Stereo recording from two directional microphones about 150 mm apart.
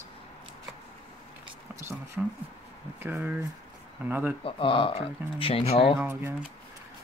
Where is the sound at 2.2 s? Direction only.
10° right (ahead or behind).